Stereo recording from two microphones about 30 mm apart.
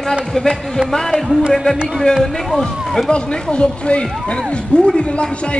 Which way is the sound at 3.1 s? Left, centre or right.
Left.